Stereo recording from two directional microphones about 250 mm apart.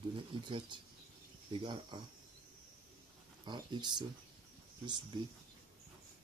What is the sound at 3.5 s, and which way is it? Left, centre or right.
Speech, centre.